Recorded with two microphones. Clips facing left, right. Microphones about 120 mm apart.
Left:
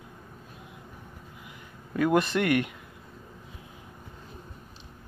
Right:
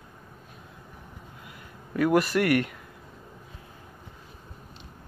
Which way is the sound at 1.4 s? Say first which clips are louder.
Right 1 dB; 20° left (ahead or behind).